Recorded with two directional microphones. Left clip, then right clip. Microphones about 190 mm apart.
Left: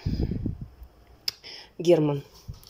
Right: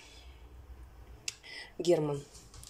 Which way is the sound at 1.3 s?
15° left (ahead or behind).